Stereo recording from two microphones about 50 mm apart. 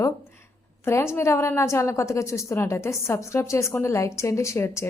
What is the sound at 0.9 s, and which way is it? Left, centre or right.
A woman's voice, left.